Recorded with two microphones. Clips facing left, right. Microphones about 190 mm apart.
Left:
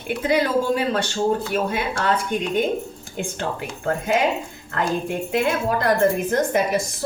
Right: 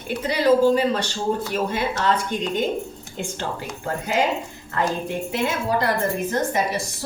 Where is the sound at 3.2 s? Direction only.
55° left (ahead or behind).